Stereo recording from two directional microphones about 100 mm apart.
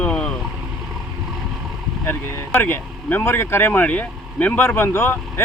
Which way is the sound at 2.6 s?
20° left (ahead or behind).